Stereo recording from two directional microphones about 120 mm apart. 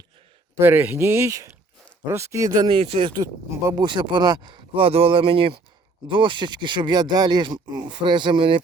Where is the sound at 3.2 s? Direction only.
30° right (ahead or behind).